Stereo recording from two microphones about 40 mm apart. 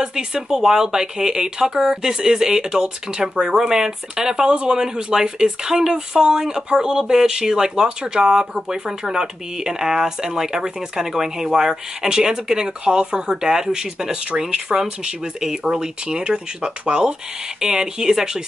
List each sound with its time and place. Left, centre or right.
0.0 s speech: centre